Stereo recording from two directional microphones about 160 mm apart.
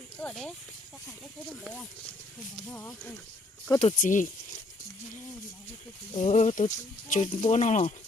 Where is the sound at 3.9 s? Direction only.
55° left (ahead or behind).